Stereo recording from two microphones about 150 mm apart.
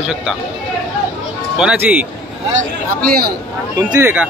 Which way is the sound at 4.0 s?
15° right (ahead or behind).